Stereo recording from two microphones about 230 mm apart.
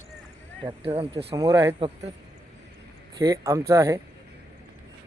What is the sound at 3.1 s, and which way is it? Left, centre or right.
Speech, centre.